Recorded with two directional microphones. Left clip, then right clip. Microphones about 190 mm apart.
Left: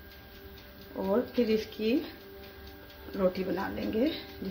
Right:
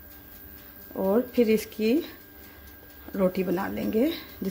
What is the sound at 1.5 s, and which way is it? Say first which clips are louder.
Speech: right 5 dB; 65° right (ahead or behind).